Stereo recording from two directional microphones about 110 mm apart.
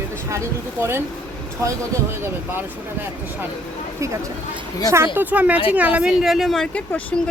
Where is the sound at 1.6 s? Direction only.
25° right (ahead or behind).